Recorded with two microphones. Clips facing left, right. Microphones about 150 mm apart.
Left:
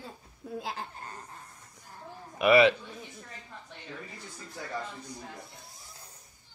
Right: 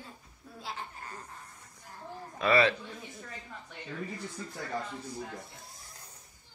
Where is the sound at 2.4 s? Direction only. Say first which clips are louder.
Left 5 dB; 15° left (ahead or behind).